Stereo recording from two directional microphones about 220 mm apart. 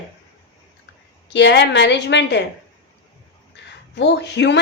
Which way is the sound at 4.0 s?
50° left (ahead or behind).